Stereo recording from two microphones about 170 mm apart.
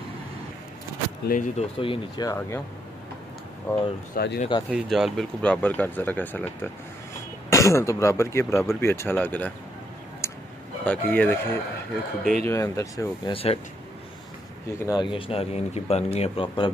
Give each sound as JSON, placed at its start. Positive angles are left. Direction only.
{"t": 1.2, "sound": "speech", "side_deg": 55}
{"t": 1.6, "sound": "speech", "side_deg": 30}
{"t": 2.2, "sound": "speech", "side_deg": 15}
{"t": 3.7, "sound": "speech", "side_deg": 10}
{"t": 4.1, "sound": "speech", "side_deg": 80}
{"t": 4.6, "sound": "speech", "side_deg": -5}
{"t": 10.2, "sound": "a sound", "side_deg": 15}
{"t": 10.9, "sound": "speech", "side_deg": 10}
{"t": 12.4, "sound": "speech", "side_deg": 20}
{"t": 13.3, "sound": "speech", "side_deg": 35}
{"t": 14.7, "sound": "speech", "side_deg": 20}